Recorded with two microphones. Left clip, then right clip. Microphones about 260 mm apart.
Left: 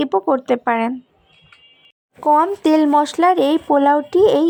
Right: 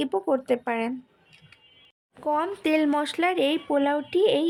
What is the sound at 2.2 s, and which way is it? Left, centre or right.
A woman's voice, centre.